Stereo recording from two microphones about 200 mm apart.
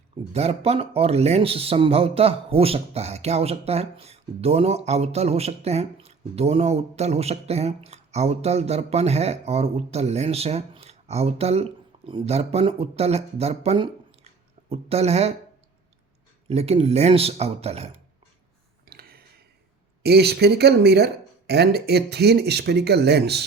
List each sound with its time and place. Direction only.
0.3 s a man's voice: 30° right (ahead or behind)
16.5 s a man's voice: 30° right (ahead or behind)
18.9 s a sound: 50° right (ahead or behind)
20.0 s speech: 55° right (ahead or behind)